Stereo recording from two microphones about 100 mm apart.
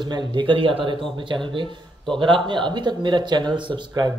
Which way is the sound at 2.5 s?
50° right (ahead or behind).